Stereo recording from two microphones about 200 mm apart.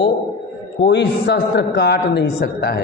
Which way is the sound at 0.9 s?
60° left (ahead or behind).